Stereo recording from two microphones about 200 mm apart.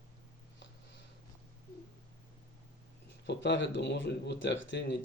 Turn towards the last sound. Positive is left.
turn(degrees=65)  # may be behind; listen again after turning